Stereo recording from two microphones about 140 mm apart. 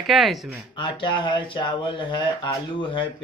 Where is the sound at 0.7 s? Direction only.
35° left (ahead or behind).